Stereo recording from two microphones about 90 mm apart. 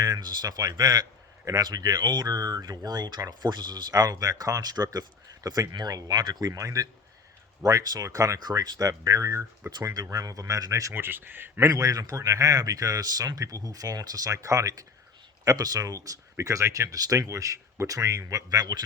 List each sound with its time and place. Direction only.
0.0 s speech: 45° right (ahead or behind); by 11.7 s 25° right (ahead or behind)
11.7 s speech: 40° right (ahead or behind)